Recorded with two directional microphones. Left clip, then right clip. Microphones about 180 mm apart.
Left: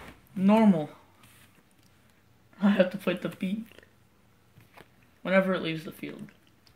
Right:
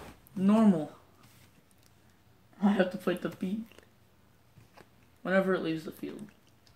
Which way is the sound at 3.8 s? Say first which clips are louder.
Left 3 dB; 10° left (ahead or behind).